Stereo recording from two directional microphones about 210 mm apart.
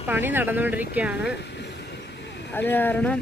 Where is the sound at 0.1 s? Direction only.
10° right (ahead or behind).